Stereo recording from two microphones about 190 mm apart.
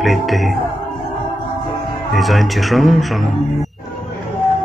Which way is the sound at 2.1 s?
Centre (ahead or behind).